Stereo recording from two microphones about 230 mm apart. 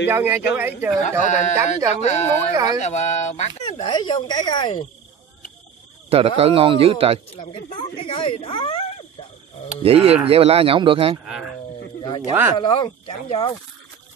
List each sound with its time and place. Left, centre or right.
0.1 s speech: centre
1.2 s speech: left
2.5 s speech: centre
2.8 s speech: left
3.6 s speech: centre
6.0 s speech: right
7.3 s speech: left
9.8 s speech: right
12.5 s speech: centre